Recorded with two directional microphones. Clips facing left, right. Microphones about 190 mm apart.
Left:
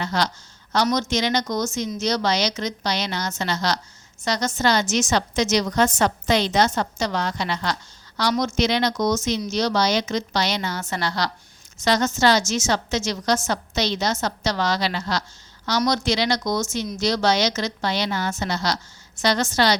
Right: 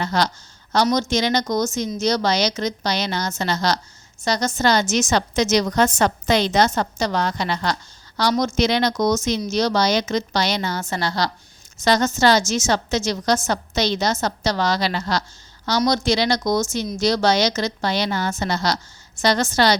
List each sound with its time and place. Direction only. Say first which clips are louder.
0.0 s a woman's voice: right 3 dB; 40° right (ahead or behind)